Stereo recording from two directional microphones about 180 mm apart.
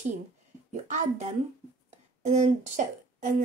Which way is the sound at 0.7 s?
40° right (ahead or behind).